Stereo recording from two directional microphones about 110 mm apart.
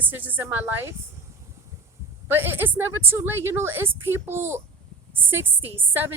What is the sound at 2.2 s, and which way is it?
A woman's voice, 20° right (ahead or behind).